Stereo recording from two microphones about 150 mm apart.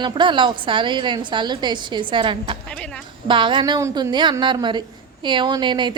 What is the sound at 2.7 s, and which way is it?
Speech, 5° left (ahead or behind).